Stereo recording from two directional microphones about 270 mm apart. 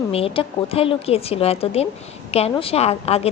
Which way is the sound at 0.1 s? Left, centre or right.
Left.